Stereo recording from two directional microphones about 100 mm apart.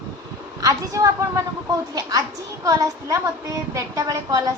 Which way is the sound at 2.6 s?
35° right (ahead or behind).